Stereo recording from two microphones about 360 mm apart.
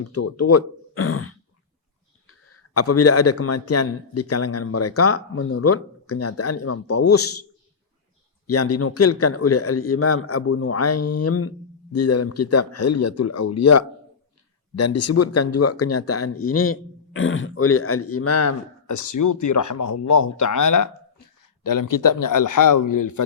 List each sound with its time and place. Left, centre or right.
0.0 s speech: left
2.5 s a man's voice: left
8.4 s a man's voice: left